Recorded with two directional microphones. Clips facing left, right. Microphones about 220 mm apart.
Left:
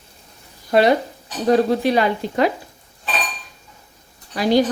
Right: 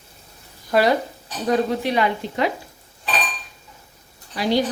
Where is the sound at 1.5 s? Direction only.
35° left (ahead or behind).